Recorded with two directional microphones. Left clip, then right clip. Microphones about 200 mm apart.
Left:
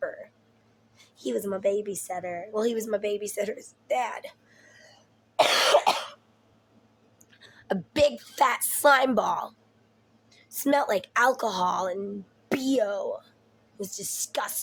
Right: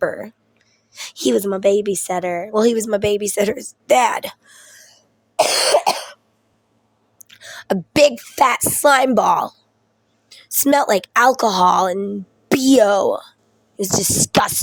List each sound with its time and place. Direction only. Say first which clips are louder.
0.0 s a sound: right 12 dB; 55° right (ahead or behind)
0.9 s a woman's voice: right 13 dB; 55° right (ahead or behind)
5.4 s cough: right 5 dB; 55° right (ahead or behind)
7.2 s a woman's voice: right 17 dB; 45° right (ahead or behind)
10.2 s a woman's voice: right 9 dB; 55° right (ahead or behind)